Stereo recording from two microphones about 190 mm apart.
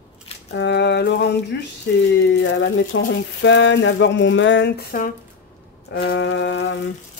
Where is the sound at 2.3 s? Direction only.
75° left (ahead or behind).